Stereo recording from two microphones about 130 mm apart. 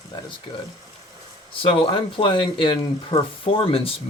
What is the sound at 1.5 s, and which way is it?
Speech, 45° left (ahead or behind).